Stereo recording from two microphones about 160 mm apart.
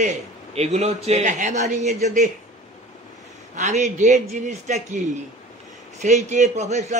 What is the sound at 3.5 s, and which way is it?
A man's voice, 50° right (ahead or behind).